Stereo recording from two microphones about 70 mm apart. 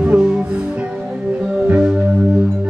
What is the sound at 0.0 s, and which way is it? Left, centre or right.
Music, centre.